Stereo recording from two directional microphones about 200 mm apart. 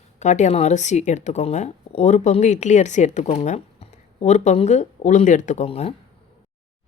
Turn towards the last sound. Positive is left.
turn(degrees=30)  # may be behind; listen again after turning